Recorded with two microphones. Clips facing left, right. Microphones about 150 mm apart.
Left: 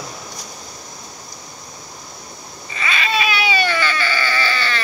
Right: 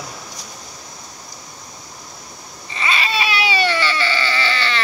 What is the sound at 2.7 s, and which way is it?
Baby cry, 30° right (ahead or behind).